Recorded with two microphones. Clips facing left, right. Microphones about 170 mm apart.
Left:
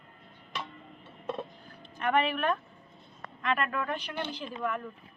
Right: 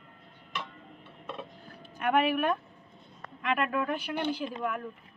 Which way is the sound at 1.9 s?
10° right (ahead or behind).